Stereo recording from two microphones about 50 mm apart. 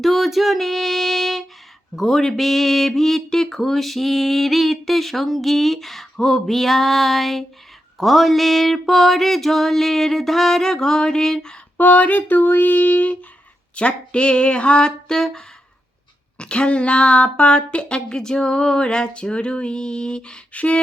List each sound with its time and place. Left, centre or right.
0.0 s music: centre
2.0 s speech: centre
11.8 s female singing: left
13.7 s a woman's voice: left
16.4 s a woman's voice: left